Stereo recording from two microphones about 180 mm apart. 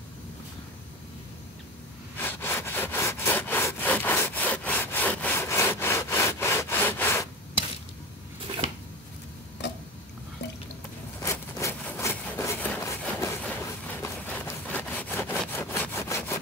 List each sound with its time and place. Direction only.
2.1 s sawing: 10° left (ahead or behind)
10.4 s drip: 70° left (ahead or behind)
11.2 s wood: 15° left (ahead or behind)